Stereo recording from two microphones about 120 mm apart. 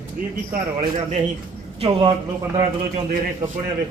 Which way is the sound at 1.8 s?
40° right (ahead or behind).